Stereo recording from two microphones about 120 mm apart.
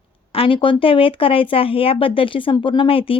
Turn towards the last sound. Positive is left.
turn(degrees=50)  # may be behind; listen again after turning